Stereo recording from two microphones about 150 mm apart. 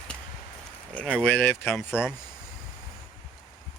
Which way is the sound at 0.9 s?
10° left (ahead or behind).